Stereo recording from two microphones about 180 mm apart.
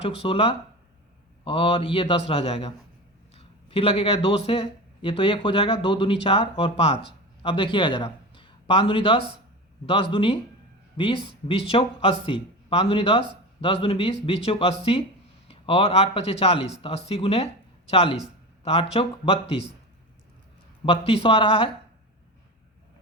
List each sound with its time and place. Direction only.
0.2 s a man's voice: 30° left (ahead or behind)
20.8 s speech: 30° left (ahead or behind)